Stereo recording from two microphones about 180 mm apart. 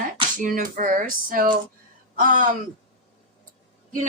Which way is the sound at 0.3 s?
45° right (ahead or behind).